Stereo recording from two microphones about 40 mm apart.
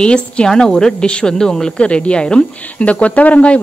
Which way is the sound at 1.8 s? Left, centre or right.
Left.